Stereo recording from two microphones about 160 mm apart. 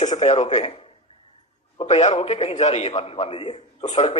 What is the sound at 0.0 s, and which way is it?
Speech, 45° left (ahead or behind).